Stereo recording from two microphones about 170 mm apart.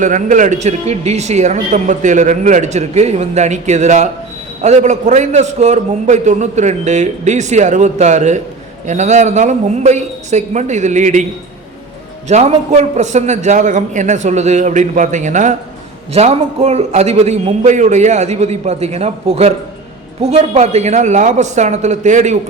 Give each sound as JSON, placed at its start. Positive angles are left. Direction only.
{"t": 0.0, "sound": "speech", "side_deg": -50}
{"t": 12.3, "sound": "a man's voice", "side_deg": -40}